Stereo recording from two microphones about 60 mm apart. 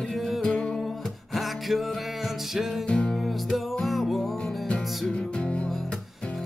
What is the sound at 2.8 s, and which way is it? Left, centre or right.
Music, centre.